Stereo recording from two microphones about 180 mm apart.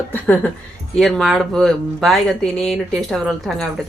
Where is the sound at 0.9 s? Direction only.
Centre (ahead or behind).